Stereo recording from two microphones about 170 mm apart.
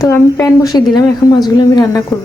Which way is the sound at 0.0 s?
15° left (ahead or behind).